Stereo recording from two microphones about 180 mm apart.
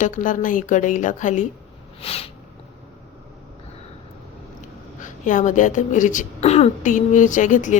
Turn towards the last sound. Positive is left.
turn(degrees=45)  # may be behind; listen again after turning